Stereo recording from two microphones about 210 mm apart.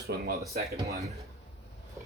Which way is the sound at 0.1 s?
45° right (ahead or behind).